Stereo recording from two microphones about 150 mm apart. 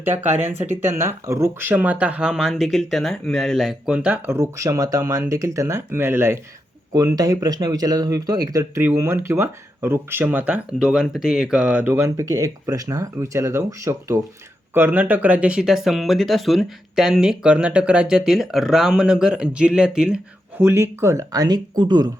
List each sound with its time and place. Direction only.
0.0 s speech: 15° right (ahead or behind)